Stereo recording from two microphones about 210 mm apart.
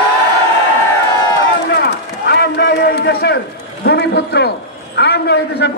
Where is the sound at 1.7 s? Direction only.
50° left (ahead or behind).